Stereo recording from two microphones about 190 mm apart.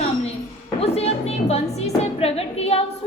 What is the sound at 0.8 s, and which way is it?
A woman's voice, 30° left (ahead or behind).